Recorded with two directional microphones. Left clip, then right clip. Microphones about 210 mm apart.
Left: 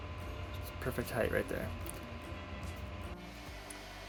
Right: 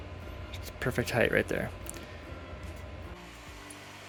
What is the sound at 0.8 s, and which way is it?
Speech, 40° right (ahead or behind).